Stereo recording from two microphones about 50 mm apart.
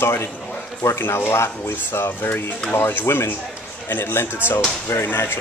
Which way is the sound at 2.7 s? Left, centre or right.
Left.